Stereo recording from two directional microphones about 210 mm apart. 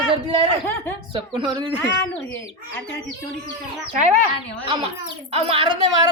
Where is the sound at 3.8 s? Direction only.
35° right (ahead or behind).